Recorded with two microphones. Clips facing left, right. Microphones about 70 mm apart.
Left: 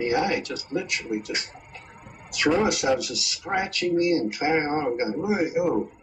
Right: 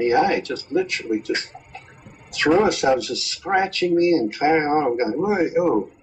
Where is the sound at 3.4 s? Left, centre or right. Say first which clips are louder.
Right 6 dB; right.